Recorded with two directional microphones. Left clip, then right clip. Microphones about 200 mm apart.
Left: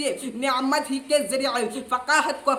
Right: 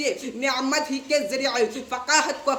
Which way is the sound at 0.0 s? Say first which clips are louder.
Right 1 dB; 20° left (ahead or behind).